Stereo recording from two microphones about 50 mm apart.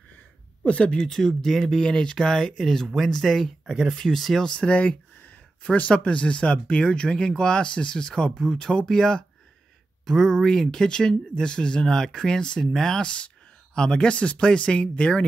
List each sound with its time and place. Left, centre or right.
0.7 s speech: left; by 3.4 s centre
3.6 s speech: centre
4.0 s speech: centre
4.6 s speech: left